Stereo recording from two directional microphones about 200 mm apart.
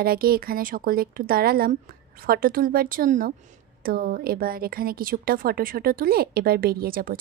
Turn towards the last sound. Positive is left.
turn(degrees=-45)  # may be behind; listen again after turning